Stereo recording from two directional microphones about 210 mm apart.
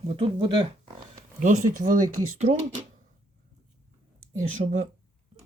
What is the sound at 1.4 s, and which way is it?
Speech, 40° right (ahead or behind).